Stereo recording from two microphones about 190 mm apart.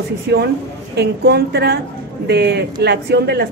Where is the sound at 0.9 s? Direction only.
60° right (ahead or behind).